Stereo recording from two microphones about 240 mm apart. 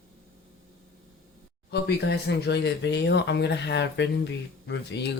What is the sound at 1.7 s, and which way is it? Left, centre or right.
Speech, left.